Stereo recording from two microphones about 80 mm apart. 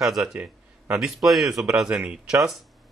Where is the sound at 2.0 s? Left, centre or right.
Centre.